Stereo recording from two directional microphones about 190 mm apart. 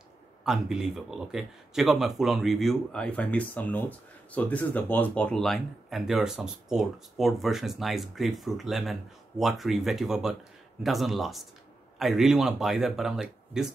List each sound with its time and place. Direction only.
0.4 s speech: 5° right (ahead or behind)